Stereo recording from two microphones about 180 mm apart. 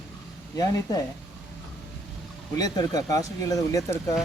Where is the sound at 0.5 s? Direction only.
20° left (ahead or behind).